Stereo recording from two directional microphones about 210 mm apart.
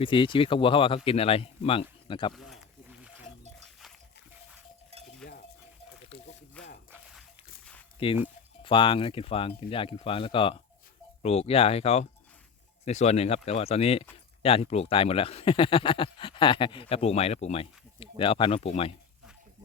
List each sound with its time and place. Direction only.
0.0 s speech: 25° left (ahead or behind)
2.3 s wild animals: centre (ahead or behind)
5.2 s cowbell: 5° left (ahead or behind)
6.1 s a sound: 25° left (ahead or behind)
6.6 s a sound: 5° left (ahead or behind)
7.9 s speech: 25° left (ahead or behind)